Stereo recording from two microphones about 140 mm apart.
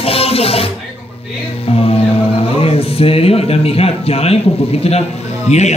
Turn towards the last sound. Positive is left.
turn(degrees=55)  # may be behind; listen again after turning